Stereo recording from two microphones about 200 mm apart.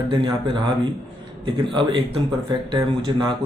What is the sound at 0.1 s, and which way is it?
Speech, 25° right (ahead or behind).